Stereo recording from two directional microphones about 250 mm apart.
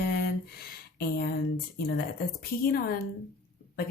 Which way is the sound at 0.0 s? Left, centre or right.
Left.